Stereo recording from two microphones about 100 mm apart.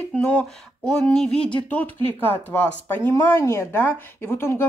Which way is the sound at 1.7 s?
15° left (ahead or behind).